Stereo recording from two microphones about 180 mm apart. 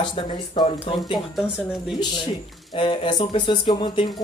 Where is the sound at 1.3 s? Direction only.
Centre (ahead or behind).